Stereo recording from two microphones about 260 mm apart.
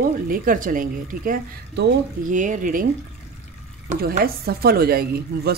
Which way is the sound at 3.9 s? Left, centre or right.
Right.